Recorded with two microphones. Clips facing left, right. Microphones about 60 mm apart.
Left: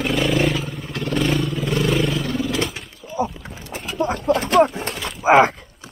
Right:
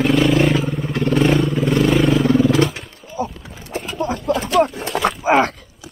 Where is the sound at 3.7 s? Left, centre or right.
Centre.